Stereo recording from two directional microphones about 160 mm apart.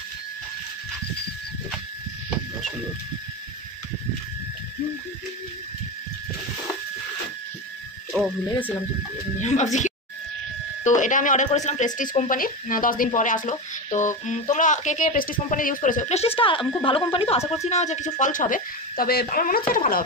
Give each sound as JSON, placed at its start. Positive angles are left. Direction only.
{"t": 9.4, "sound": "speech", "side_deg": 45}
{"t": 17.6, "sound": "speech", "side_deg": 45}